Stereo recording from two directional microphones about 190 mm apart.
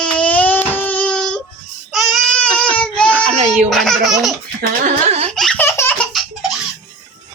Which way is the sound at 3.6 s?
Centre (ahead or behind).